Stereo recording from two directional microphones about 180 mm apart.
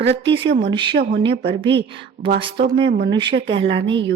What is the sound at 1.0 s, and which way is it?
Speech, 65° right (ahead or behind).